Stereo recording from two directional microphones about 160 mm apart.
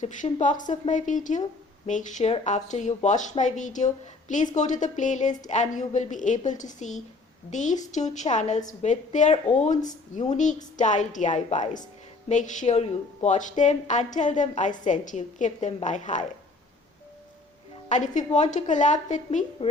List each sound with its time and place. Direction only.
0.0 s speech: 50° left (ahead or behind)
17.8 s speech: 50° left (ahead or behind)